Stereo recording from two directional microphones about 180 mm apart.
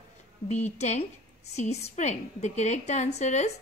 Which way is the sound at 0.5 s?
40° left (ahead or behind).